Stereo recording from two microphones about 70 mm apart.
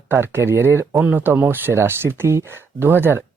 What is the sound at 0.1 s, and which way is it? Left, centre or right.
Speech, right.